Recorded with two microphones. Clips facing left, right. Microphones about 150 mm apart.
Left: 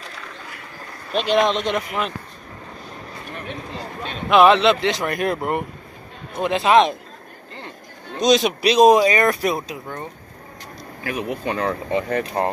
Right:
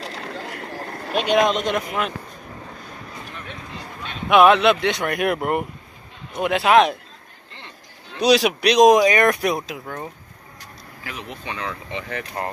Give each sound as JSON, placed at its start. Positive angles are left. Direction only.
{"t": 0.0, "sound": "a sound", "side_deg": -70}
{"t": 1.3, "sound": "speech", "side_deg": -5}
{"t": 4.3, "sound": "speech", "side_deg": 0}
{"t": 8.2, "sound": "speech", "side_deg": -5}
{"t": 11.2, "sound": "speech", "side_deg": 45}